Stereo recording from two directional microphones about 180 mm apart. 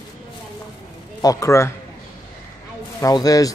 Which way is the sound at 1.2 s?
20° left (ahead or behind).